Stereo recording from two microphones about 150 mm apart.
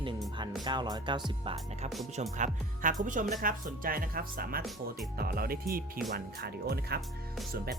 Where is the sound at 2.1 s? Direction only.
55° right (ahead or behind).